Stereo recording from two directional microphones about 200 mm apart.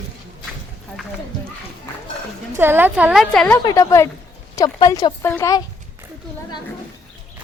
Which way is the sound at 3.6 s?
15° left (ahead or behind).